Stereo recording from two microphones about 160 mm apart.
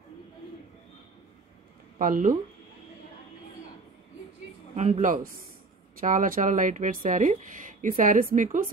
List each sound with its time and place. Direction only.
2.0 s speech: 60° right (ahead or behind)
4.7 s a man's voice: 45° right (ahead or behind)